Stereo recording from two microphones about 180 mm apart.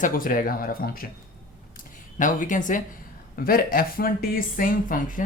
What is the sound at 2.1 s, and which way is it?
Speech, 45° left (ahead or behind).